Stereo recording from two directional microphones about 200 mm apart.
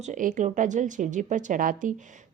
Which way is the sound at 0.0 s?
40° right (ahead or behind).